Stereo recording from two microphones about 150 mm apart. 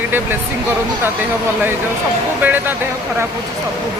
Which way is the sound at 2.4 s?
10° right (ahead or behind).